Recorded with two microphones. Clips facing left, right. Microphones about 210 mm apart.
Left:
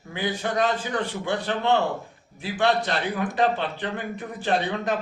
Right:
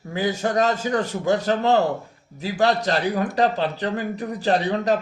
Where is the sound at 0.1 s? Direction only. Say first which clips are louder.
Right 4 dB; 40° right (ahead or behind).